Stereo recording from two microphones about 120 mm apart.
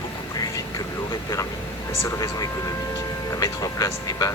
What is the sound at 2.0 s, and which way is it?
Speech, 25° left (ahead or behind).